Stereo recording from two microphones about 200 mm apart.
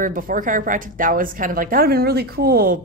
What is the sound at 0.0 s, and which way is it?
A woman's voice, 45° right (ahead or behind).